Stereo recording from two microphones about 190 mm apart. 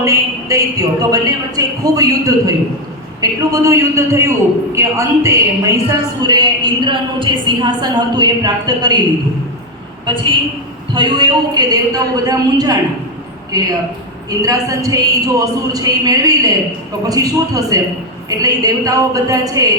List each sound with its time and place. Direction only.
0.0 s a man's voice: 15° right (ahead or behind)
10.9 s a man's voice: 25° right (ahead or behind)